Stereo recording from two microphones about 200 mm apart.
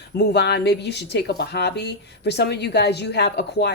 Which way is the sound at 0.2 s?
55° left (ahead or behind).